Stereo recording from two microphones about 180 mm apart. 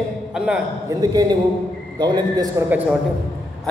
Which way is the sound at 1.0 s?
20° right (ahead or behind).